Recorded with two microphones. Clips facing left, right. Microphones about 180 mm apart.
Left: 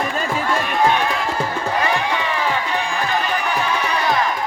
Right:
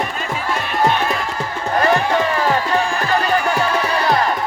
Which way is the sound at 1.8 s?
45° right (ahead or behind).